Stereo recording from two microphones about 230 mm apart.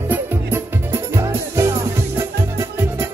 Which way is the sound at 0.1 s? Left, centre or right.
Centre.